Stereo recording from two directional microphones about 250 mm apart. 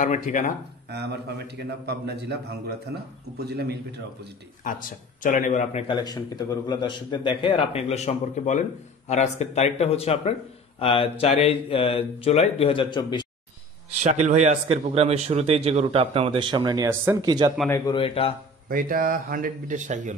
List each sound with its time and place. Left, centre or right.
0.0 s speech: left
0.8 s a man's voice: right
4.6 s a man's voice: left
14.2 s speech: right
17.6 s a man's voice: centre
18.7 s a man's voice: right